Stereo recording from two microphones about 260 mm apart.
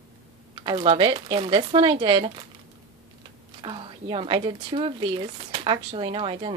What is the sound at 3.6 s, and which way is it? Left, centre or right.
Speech, centre.